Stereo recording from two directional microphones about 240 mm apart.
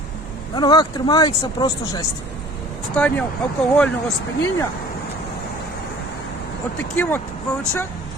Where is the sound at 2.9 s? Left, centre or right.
Centre.